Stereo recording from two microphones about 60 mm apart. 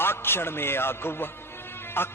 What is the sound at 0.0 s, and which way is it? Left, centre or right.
A man's voice, left.